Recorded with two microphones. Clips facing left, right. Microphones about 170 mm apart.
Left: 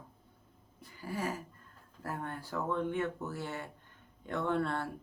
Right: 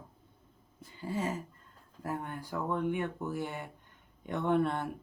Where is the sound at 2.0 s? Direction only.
15° right (ahead or behind).